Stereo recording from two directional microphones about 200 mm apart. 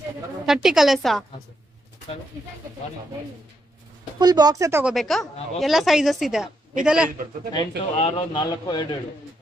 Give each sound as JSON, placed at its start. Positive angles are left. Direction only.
{"t": 0.5, "sound": "a woman's voice", "side_deg": 0}
{"t": 4.2, "sound": "speech", "side_deg": -20}
{"t": 4.9, "sound": "a woman's voice", "side_deg": 0}
{"t": 7.5, "sound": "a man's voice", "side_deg": 25}